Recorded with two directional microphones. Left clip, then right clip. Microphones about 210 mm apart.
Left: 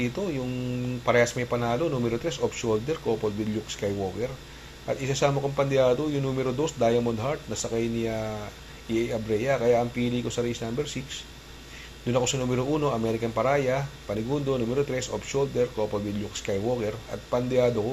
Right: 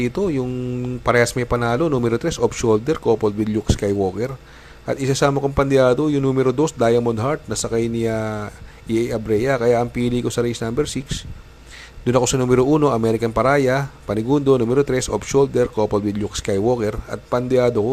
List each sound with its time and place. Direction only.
0.0 s speech: 55° right (ahead or behind)